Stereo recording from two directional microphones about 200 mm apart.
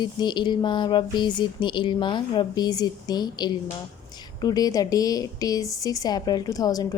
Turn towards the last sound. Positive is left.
turn(degrees=20)  # may be behind; listen again after turning